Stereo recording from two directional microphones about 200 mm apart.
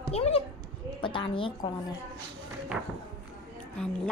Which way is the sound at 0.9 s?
25° left (ahead or behind).